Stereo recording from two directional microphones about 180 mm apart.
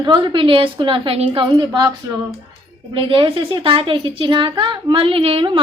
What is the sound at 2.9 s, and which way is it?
Speech, 30° right (ahead or behind).